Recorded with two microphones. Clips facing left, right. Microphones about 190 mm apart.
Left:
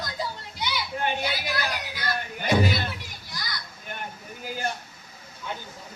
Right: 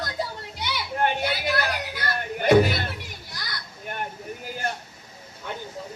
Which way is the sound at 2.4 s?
55° right (ahead or behind).